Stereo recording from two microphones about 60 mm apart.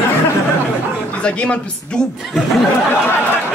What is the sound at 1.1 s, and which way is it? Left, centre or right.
Speech, centre.